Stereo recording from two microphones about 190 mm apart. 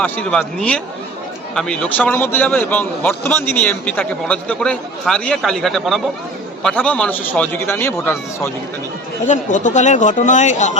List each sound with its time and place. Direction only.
0.0 s a man's voice: 5° left (ahead or behind)
9.2 s speech: 40° left (ahead or behind)